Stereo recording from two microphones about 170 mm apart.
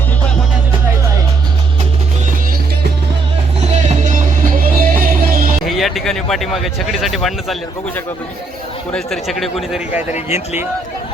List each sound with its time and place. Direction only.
3.8 s music: 45° right (ahead or behind)
5.6 s speech: centre (ahead or behind)
8.9 s a man's voice: 5° left (ahead or behind)